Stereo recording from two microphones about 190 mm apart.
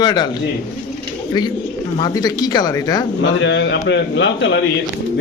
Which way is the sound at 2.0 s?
20° left (ahead or behind).